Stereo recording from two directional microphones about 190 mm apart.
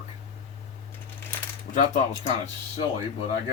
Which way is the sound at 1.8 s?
40° left (ahead or behind).